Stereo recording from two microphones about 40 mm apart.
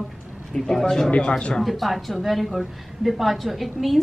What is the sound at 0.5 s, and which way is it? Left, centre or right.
Speech, centre.